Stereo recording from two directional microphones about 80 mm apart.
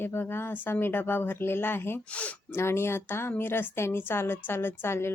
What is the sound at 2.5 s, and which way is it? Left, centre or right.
A woman's voice, left.